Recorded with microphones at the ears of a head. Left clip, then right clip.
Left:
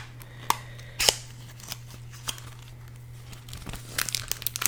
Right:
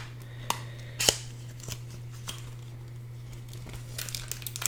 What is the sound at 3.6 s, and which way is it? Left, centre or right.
Crumpling, left.